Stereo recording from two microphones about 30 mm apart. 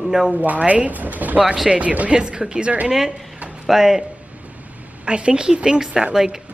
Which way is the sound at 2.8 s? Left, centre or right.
Right.